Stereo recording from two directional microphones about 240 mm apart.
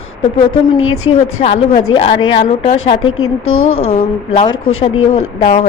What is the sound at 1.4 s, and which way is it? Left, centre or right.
A woman's voice, left.